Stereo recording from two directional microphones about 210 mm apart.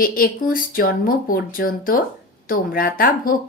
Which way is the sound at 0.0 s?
45° left (ahead or behind).